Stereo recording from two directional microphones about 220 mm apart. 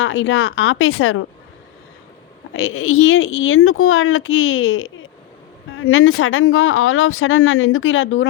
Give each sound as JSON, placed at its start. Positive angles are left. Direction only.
{"t": 0.0, "sound": "speech", "side_deg": 60}
{"t": 2.5, "sound": "speech", "side_deg": 60}